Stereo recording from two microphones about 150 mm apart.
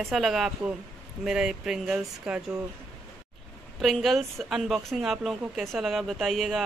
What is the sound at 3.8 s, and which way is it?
Speech, centre (ahead or behind).